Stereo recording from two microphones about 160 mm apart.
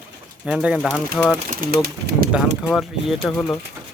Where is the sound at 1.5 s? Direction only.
60° right (ahead or behind).